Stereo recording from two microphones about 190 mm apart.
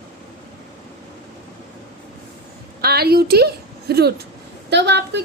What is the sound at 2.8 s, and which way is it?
A woman's voice, 55° right (ahead or behind).